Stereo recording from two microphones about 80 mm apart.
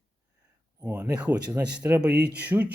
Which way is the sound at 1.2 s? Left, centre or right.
Centre.